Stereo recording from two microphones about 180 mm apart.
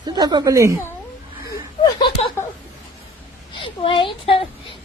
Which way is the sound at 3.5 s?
30° left (ahead or behind).